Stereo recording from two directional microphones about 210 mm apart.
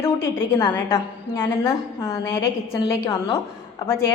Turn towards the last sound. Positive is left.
turn(degrees=15)  # may be behind; listen again after turning